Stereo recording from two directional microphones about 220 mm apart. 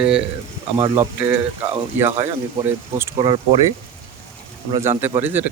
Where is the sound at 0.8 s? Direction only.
20° right (ahead or behind).